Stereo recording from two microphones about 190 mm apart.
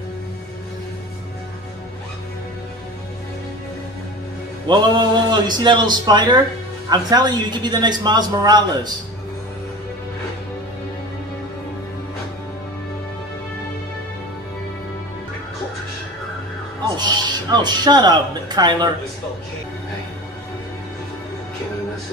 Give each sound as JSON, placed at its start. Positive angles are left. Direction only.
{"t": 4.6, "sound": "a man's voice", "side_deg": -25}
{"t": 16.9, "sound": "speech", "side_deg": -20}